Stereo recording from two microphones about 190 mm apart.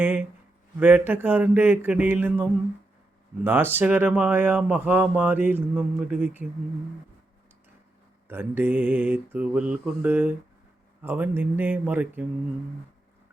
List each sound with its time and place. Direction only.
0.0 s a sound: 10° right (ahead or behind)
0.8 s speech: 10° right (ahead or behind)
8.3 s speech: 10° right (ahead or behind)